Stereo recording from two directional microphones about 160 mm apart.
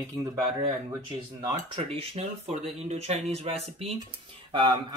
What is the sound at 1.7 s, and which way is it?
Speech, 40° right (ahead or behind).